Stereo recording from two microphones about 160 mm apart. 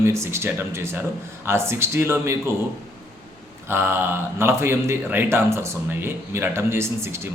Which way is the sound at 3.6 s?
15° right (ahead or behind).